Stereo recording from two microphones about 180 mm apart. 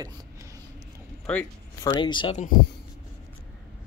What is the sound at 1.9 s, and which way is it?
Speech, 25° left (ahead or behind).